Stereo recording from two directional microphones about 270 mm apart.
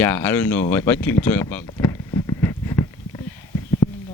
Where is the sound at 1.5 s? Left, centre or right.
Centre.